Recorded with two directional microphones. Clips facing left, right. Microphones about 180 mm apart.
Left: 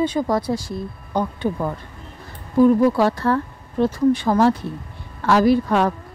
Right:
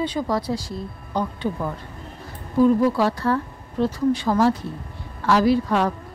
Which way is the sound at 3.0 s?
55° left (ahead or behind).